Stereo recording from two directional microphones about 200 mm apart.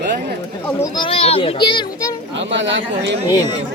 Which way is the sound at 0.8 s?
25° left (ahead or behind).